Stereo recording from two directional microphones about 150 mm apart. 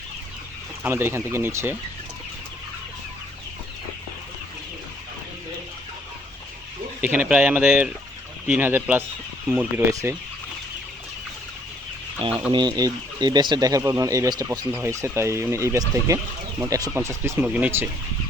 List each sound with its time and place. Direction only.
0.8 s speech: 15° right (ahead or behind)
7.0 s speech: 10° right (ahead or behind)
9.9 s speech: 20° right (ahead or behind)
12.5 s speech: 30° right (ahead or behind); by 17.8 s 10° right (ahead or behind)